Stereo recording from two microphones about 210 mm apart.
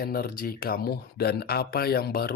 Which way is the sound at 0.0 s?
45° left (ahead or behind).